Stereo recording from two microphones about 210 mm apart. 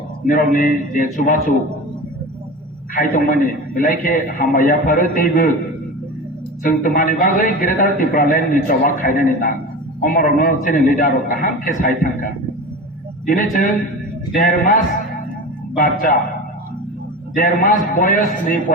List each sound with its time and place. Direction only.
0.3 s a man's voice: 40° left (ahead or behind)
2.9 s a man's voice: 40° left (ahead or behind)
6.6 s a man's voice: 40° left (ahead or behind)
17.3 s a man's voice: 40° left (ahead or behind)